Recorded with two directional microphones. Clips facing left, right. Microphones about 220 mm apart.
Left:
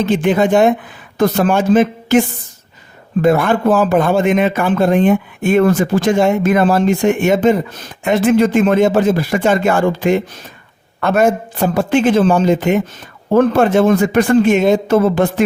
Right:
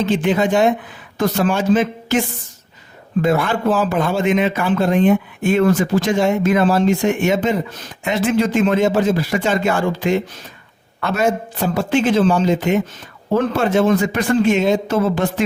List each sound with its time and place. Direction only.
0.0 s a man's voice: 50° left (ahead or behind)